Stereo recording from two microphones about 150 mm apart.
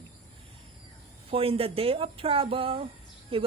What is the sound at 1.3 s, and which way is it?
Speech, 40° right (ahead or behind).